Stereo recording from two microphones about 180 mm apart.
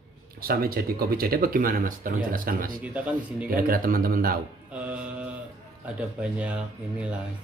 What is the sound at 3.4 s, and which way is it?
Speech, 55° right (ahead or behind).